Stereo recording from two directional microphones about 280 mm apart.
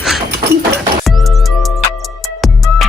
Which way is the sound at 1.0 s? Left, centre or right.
Centre.